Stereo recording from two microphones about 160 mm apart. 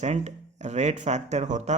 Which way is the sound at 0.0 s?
45° right (ahead or behind).